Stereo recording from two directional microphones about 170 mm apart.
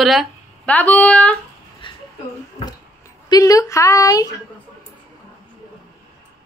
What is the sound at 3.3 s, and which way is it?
A woman's voice, 20° left (ahead or behind).